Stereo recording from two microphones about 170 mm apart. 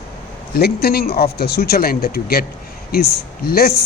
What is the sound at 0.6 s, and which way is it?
Speech, 65° left (ahead or behind).